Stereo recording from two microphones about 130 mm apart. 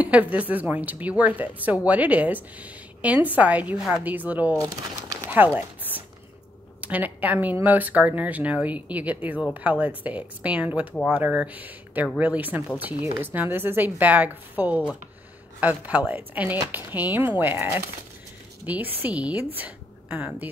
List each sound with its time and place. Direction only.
0.0 s speech: 10° right (ahead or behind)
4.6 s crumpling: 25° right (ahead or behind)
5.3 s a sound: 15° right (ahead or behind)
6.8 s speech: 10° right (ahead or behind)